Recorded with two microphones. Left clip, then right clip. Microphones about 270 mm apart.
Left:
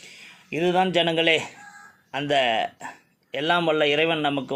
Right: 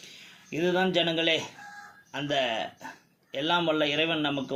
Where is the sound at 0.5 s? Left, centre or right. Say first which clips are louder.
Left 5 dB; left.